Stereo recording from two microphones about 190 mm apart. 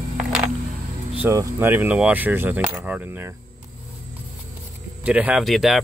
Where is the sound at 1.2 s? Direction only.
15° right (ahead or behind).